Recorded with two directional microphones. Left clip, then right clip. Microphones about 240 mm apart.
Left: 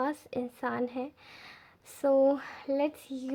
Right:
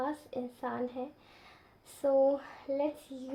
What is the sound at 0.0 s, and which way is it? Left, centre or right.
A child's voice, left.